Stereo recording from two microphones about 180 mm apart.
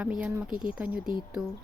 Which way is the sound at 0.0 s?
5° right (ahead or behind).